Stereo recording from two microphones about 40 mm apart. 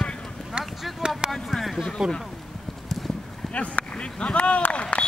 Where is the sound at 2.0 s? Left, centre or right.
Centre.